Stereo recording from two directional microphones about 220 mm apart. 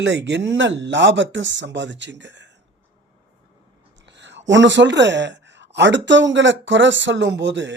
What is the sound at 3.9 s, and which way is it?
Speech, 55° right (ahead or behind).